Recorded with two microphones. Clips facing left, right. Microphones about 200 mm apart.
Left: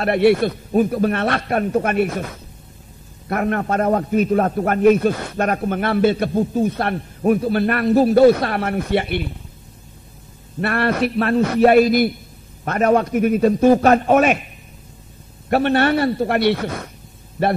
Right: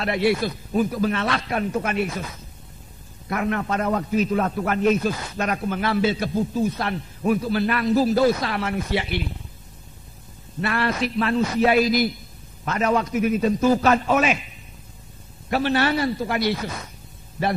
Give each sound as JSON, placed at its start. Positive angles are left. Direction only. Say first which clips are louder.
{"t": 0.0, "sound": "a man's voice", "louder": "left 6 dB", "side_deg": 55}
{"t": 10.6, "sound": "a man's voice", "louder": "left 5 dB", "side_deg": 60}
{"t": 15.5, "sound": "a man's voice", "louder": "left 5 dB", "side_deg": 55}